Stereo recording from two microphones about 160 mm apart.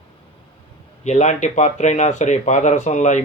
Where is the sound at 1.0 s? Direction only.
45° left (ahead or behind).